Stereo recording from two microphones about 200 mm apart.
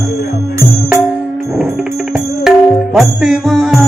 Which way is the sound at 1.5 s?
Centre (ahead or behind).